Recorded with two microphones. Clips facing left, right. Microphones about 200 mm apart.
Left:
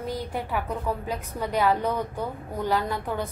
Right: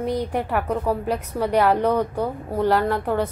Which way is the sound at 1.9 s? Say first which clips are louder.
Right 7 dB; 40° right (ahead or behind).